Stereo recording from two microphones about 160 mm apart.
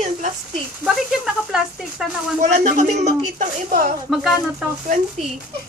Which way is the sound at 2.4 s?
45° right (ahead or behind).